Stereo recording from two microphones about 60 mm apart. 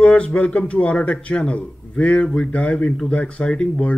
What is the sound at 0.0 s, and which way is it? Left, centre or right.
Speech, left.